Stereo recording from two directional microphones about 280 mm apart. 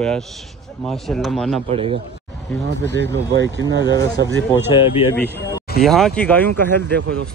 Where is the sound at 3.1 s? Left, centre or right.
Right.